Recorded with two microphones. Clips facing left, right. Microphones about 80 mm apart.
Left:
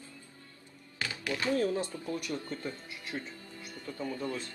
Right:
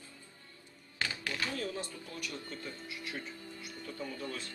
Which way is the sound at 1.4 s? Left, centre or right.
Left.